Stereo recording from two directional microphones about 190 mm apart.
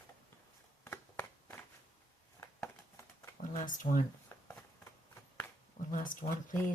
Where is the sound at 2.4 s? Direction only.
15° left (ahead or behind).